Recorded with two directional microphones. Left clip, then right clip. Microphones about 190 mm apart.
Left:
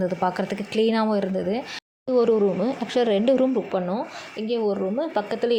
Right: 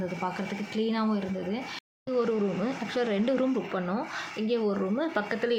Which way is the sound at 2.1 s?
20° left (ahead or behind).